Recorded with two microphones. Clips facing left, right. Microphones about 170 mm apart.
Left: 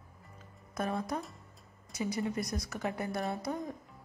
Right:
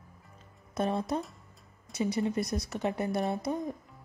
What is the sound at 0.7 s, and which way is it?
A woman's voice, 25° right (ahead or behind).